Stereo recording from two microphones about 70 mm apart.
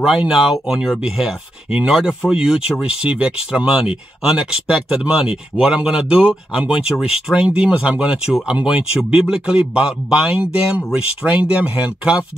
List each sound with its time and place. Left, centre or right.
0.3 s speech: centre; by 8.8 s right
9.1 s speech: centre